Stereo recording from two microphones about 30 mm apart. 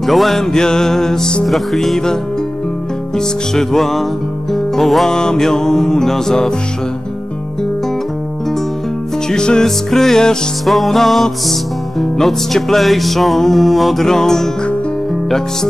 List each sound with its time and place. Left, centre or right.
0.0 s music: centre
0.4 s music: left
1.4 s music: centre
3.2 s music: centre
5.1 s music: left
9.3 s music: left
9.7 s music: centre
10.6 s music: centre
14.0 s music: centre